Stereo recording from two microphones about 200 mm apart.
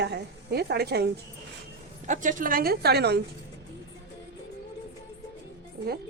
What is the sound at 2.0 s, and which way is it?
A woman's voice, 40° right (ahead or behind).